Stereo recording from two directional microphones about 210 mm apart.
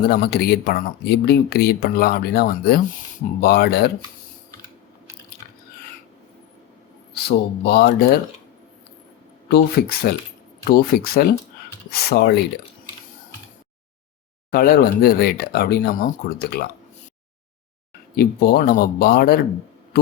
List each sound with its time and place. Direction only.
0.0 s speech: 50° left (ahead or behind)
7.1 s speech: 50° left (ahead or behind)
9.5 s speech: 50° left (ahead or behind)
14.5 s speech: 45° left (ahead or behind)
18.2 s speech: 50° left (ahead or behind)